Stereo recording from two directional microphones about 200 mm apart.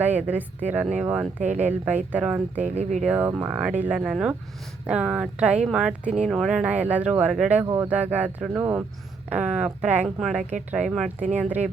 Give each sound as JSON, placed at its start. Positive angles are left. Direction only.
{"t": 0.0, "sound": "speech", "side_deg": -10}
{"t": 1.4, "sound": "speech", "side_deg": -35}
{"t": 2.1, "sound": "speech", "side_deg": -10}
{"t": 2.6, "sound": "speech", "side_deg": -35}
{"t": 3.0, "sound": "speech", "side_deg": -10}